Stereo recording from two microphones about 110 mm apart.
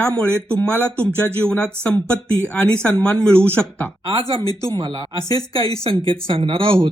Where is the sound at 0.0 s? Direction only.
10° left (ahead or behind).